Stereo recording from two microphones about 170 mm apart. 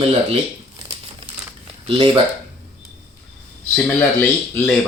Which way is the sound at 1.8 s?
30° right (ahead or behind).